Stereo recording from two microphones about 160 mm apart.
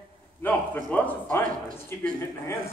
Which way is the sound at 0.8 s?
10° left (ahead or behind).